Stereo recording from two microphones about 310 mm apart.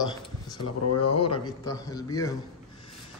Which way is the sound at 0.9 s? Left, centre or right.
Left.